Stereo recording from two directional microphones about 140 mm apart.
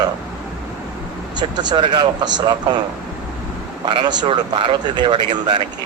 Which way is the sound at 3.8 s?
30° right (ahead or behind).